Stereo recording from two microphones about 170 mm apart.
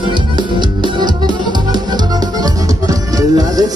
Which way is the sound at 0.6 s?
25° right (ahead or behind).